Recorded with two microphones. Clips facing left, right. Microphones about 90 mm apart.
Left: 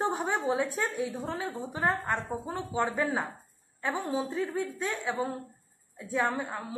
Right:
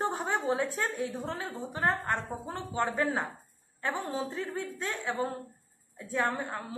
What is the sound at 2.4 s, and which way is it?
A woman's voice, 15° left (ahead or behind).